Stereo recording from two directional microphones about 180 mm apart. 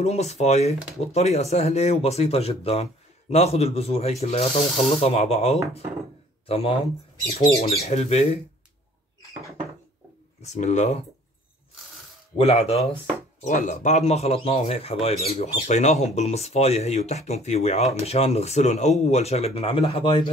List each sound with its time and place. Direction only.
0.0 s speech: 40° left (ahead or behind)
10.4 s speech: 40° left (ahead or behind)
12.4 s speech: 35° left (ahead or behind)